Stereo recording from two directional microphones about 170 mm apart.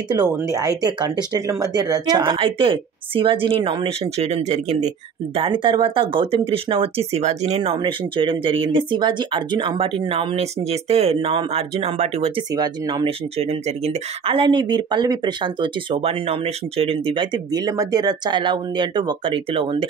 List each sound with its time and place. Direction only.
0.1 s speech: 20° right (ahead or behind); by 12.4 s 35° right (ahead or behind)
12.5 s speech: 25° right (ahead or behind)
13.4 s speech: 40° right (ahead or behind)